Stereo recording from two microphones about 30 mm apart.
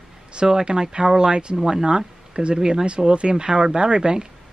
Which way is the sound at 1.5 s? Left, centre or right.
Centre.